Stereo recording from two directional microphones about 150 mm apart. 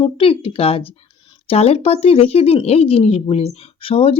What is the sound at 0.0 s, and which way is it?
Speech, 35° left (ahead or behind).